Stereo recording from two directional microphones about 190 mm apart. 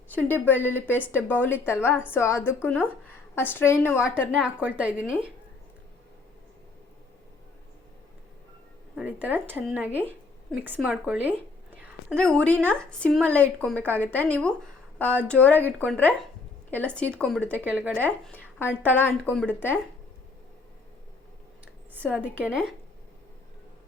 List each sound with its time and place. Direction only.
0.1 s a woman's voice: 10° left (ahead or behind)
4.1 s a woman's voice: 5° right (ahead or behind)
9.0 s a woman's voice: 10° right (ahead or behind)
11.8 s a woman's voice: centre (ahead or behind)
17.7 s a woman's voice: 10° right (ahead or behind)
18.3 s a sound: 10° left (ahead or behind)
18.9 s a woman's voice: 10° left (ahead or behind)
22.2 s a woman's voice: 5° right (ahead or behind)